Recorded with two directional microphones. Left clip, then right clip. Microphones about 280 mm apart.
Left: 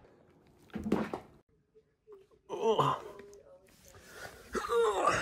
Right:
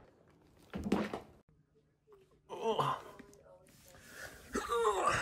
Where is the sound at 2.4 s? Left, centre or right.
Centre.